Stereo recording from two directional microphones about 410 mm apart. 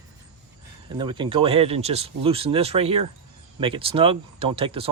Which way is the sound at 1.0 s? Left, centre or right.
Centre.